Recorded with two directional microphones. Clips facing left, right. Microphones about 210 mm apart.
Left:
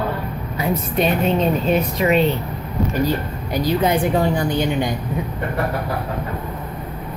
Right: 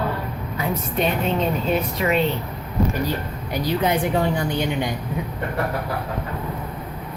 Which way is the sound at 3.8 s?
40° left (ahead or behind).